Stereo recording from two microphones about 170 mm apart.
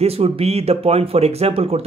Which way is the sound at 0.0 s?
35° right (ahead or behind).